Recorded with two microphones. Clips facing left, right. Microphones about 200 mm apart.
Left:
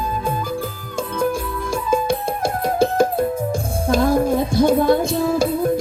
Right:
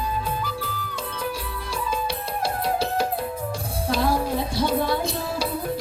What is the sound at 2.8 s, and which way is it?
Music, 50° left (ahead or behind).